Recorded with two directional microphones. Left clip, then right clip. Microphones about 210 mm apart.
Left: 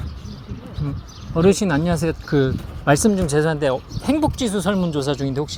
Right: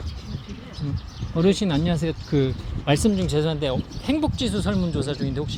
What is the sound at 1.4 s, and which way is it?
Speech, 15° left (ahead or behind).